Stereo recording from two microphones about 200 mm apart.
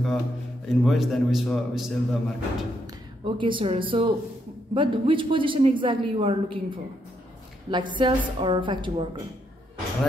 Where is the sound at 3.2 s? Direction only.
25° right (ahead or behind).